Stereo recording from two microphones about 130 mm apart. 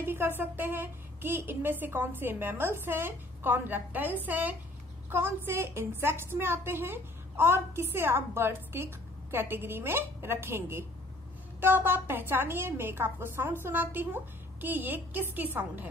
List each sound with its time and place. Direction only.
0.0 s a woman's voice: 20° right (ahead or behind)